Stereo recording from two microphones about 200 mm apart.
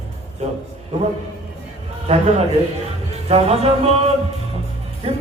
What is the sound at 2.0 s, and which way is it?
Music, 30° right (ahead or behind).